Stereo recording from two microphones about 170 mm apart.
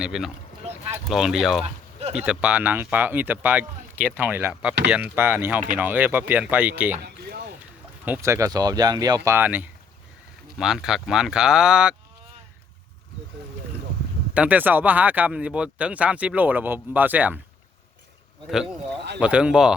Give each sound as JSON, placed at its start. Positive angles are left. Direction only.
{"t": 0.0, "sound": "speech", "side_deg": -5}
{"t": 7.0, "sound": "a sound", "side_deg": -70}
{"t": 8.0, "sound": "speech", "side_deg": -15}
{"t": 14.3, "sound": "speech", "side_deg": -10}
{"t": 18.4, "sound": "speech", "side_deg": -5}